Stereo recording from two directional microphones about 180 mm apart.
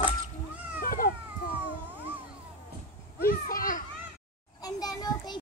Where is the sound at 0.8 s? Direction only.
55° left (ahead or behind).